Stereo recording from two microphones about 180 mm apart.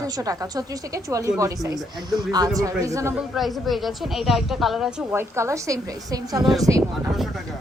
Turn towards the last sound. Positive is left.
turn(degrees=-15)  # may be behind; listen again after turning